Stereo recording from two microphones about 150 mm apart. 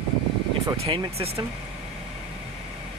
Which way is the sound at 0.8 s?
40° right (ahead or behind).